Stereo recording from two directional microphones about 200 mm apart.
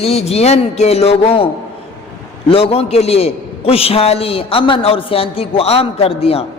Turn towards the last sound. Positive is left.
turn(degrees=30)  # may be behind; listen again after turning